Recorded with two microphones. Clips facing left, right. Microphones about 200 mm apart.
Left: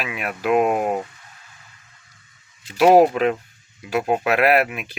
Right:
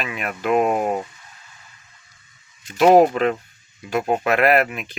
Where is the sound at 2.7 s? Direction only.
5° left (ahead or behind).